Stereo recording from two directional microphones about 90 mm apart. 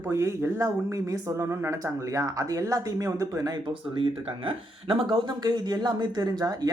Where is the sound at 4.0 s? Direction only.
70° right (ahead or behind).